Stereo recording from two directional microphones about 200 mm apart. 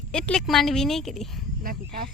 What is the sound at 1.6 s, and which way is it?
Speech, 45° right (ahead or behind).